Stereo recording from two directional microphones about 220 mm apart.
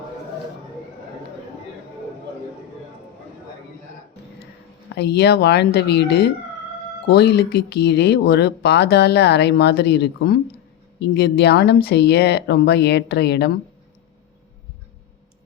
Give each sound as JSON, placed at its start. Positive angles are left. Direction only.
{"t": 4.9, "sound": "speech", "side_deg": 50}